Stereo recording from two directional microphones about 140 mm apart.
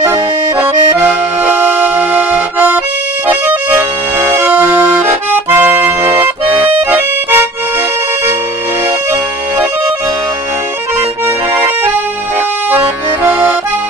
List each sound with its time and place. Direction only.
0.0 s accordion: 20° right (ahead or behind)
4.2 s music: 20° right (ahead or behind)
5.3 s accordion: 15° right (ahead or behind)
13.2 s accordion: 15° right (ahead or behind)